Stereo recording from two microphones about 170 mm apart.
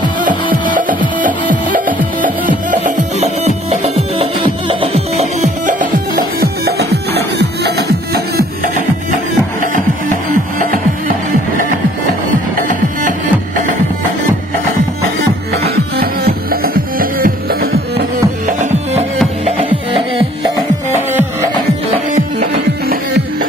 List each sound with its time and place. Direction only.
0.2 s music: 50° right (ahead or behind); by 8.5 s 70° right (ahead or behind)
10.6 s music: 55° right (ahead or behind)
12.3 s music: 50° right (ahead or behind)
15.7 s music: 65° right (ahead or behind)
22.1 s music: 45° right (ahead or behind)